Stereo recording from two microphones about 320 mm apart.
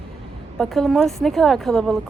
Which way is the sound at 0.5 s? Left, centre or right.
Centre.